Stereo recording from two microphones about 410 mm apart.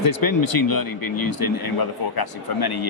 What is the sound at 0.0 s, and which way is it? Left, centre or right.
Speech, left.